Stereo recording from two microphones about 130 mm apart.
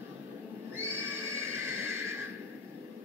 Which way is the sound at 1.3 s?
20° right (ahead or behind).